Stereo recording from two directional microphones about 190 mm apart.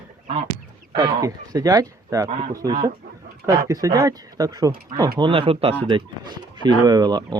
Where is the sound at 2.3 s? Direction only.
35° right (ahead or behind).